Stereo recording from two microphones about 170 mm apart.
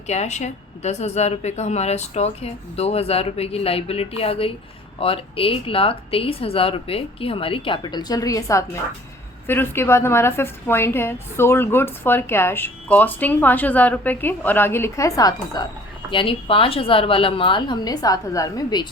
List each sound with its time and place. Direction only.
0.1 s a woman's voice: 40° left (ahead or behind); by 18.9 s 25° left (ahead or behind)